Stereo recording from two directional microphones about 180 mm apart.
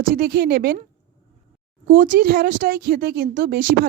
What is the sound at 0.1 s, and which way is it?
Speech, 55° right (ahead or behind).